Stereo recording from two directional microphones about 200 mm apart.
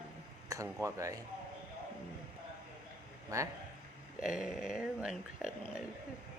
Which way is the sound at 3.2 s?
15° right (ahead or behind).